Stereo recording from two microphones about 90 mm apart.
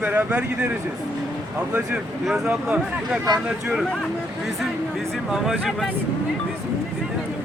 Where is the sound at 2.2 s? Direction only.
5° right (ahead or behind).